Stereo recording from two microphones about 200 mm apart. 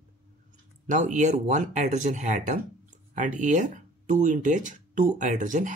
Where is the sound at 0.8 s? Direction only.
40° right (ahead or behind).